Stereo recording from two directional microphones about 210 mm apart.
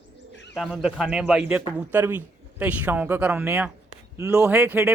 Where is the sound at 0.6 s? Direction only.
5° right (ahead or behind).